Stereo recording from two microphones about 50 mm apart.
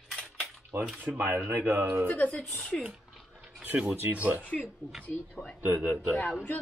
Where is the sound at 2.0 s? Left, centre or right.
Left.